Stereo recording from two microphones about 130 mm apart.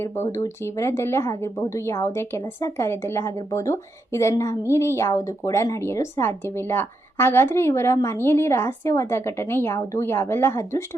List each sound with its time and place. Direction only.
0.0 s a woman's voice: 20° left (ahead or behind)